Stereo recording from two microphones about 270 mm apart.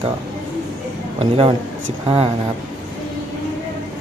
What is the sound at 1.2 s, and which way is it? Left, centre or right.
A man's voice, centre.